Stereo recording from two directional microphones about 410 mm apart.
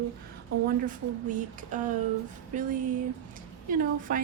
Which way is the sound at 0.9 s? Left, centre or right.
Centre.